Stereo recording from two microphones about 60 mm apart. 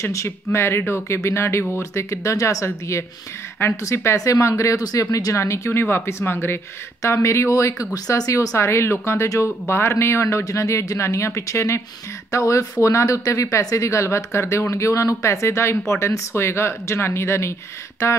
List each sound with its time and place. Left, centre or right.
0.0 s speech: left
2.6 s speech: left
4.2 s speech: left
5.1 s speech: left
7.0 s speech: left
7.9 s speech: left
10.4 s speech: left